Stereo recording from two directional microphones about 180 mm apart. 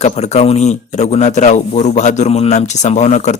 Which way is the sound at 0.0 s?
40° left (ahead or behind).